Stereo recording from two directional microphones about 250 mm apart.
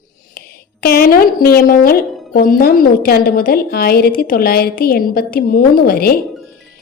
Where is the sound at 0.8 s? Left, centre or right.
Left.